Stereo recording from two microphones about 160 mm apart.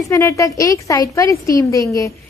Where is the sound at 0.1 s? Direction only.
15° left (ahead or behind).